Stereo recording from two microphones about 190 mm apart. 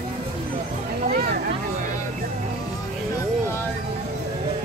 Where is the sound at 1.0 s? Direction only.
35° right (ahead or behind).